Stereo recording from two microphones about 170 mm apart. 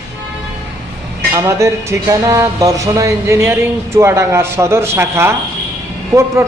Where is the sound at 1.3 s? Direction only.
15° right (ahead or behind).